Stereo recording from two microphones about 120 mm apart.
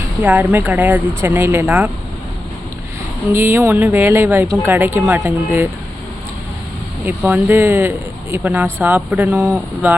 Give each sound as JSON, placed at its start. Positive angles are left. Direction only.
{"t": 0.2, "sound": "speech", "side_deg": -15}
{"t": 3.3, "sound": "speech", "side_deg": -20}
{"t": 7.3, "sound": "speech", "side_deg": -15}